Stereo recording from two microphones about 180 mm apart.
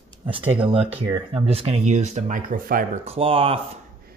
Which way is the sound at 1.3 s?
35° right (ahead or behind).